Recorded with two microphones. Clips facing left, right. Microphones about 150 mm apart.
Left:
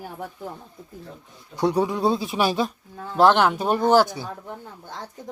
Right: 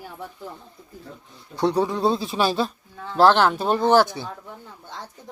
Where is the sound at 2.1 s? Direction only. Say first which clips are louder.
Even; 15° left (ahead or behind).